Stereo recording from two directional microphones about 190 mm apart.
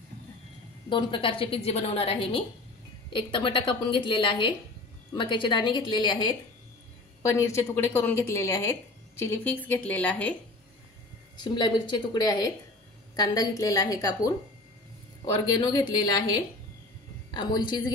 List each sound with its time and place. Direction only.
0.8 s a woman's voice: 25° left (ahead or behind); by 10.3 s 5° left (ahead or behind)
11.3 s a woman's voice: 25° left (ahead or behind)
15.3 s a woman's voice: 25° left (ahead or behind)
17.4 s a woman's voice: 20° left (ahead or behind)